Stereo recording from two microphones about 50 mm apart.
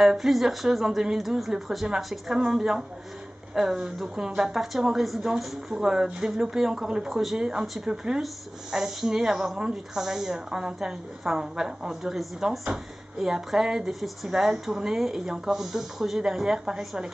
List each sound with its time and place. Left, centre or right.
0.0 s speech: centre
7.6 s speech: centre
7.9 s speech: centre